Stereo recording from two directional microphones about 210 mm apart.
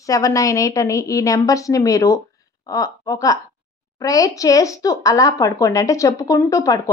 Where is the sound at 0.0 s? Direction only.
15° left (ahead or behind).